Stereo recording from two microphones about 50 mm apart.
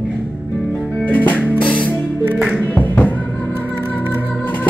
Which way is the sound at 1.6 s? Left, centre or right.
Left.